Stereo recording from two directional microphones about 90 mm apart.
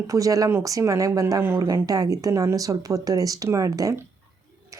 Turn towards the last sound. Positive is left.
turn(degrees=-40)  # may be behind; listen again after turning